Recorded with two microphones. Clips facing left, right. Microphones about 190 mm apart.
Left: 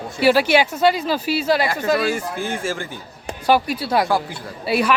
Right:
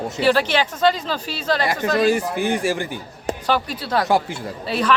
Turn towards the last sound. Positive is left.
turn(degrees=10)  # may be behind; listen again after turning